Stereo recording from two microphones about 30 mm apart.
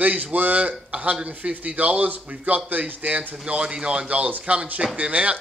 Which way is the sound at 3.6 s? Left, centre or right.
Right.